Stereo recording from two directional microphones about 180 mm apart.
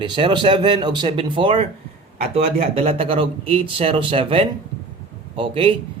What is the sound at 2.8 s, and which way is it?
A man's voice, 35° right (ahead or behind).